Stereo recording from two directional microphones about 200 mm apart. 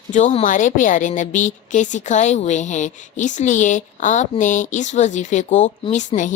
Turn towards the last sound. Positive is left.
turn(degrees=35)  # may be behind; listen again after turning